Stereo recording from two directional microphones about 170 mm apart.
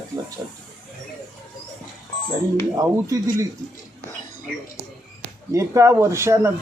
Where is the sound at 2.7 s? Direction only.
20° right (ahead or behind).